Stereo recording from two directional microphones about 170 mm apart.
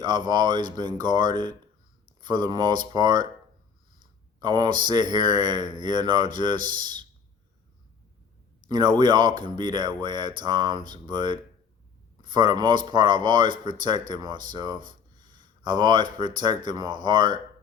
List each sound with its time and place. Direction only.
0.0 s speech: 25° right (ahead or behind)
4.4 s speech: 25° right (ahead or behind)
8.6 s speech: 25° right (ahead or behind)